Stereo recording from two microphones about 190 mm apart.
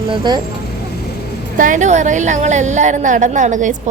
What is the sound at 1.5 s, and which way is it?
A woman's voice, 45° right (ahead or behind).